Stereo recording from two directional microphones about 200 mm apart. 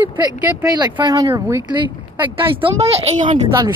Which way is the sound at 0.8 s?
20° right (ahead or behind).